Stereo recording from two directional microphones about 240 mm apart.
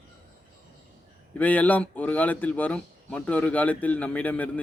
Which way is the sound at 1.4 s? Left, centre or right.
Centre.